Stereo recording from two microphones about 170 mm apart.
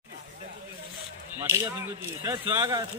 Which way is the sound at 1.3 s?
15° right (ahead or behind).